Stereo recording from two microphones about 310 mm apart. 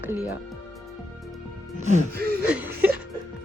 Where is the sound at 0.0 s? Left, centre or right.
Centre.